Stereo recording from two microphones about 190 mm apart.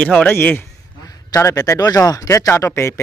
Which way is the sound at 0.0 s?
5° left (ahead or behind).